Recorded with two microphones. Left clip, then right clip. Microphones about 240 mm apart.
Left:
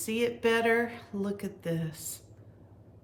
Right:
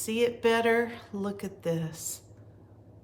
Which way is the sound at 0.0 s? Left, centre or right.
Centre.